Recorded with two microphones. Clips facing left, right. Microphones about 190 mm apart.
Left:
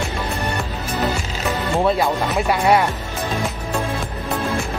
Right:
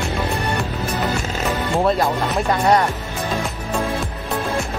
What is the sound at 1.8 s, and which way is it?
Speech, centre (ahead or behind).